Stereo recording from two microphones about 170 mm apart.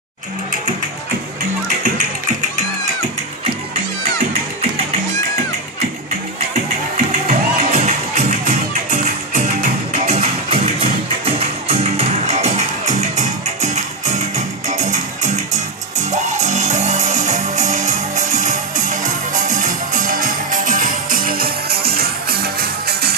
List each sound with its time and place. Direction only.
1.8 s music: 50° right (ahead or behind)
6.5 s music: 55° right (ahead or behind)
9.6 s music: 45° right (ahead or behind); by 23.1 s 70° right (ahead or behind)